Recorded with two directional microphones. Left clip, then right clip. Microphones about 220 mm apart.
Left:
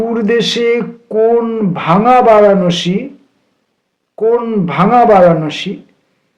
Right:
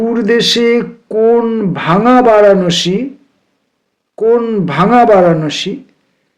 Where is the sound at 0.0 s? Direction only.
35° right (ahead or behind).